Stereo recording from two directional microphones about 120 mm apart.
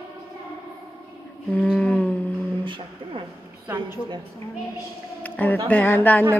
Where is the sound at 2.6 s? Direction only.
45° right (ahead or behind).